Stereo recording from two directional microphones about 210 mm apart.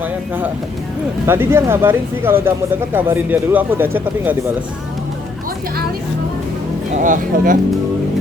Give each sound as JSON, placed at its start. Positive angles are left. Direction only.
{"t": 0.0, "sound": "speech", "side_deg": -10}
{"t": 6.9, "sound": "speech", "side_deg": -40}